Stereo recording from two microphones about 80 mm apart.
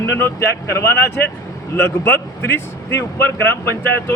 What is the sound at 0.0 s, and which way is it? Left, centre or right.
A man's voice, left.